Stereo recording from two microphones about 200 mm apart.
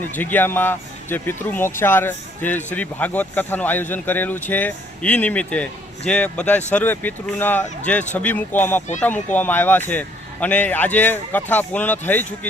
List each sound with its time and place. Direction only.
0.2 s speech: 10° left (ahead or behind)